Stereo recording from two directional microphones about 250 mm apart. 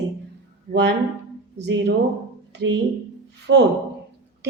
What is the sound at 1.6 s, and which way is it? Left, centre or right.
Speech, right.